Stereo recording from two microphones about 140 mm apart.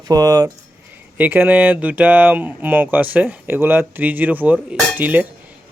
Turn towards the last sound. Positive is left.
turn(degrees=-10)  # may be behind; listen again after turning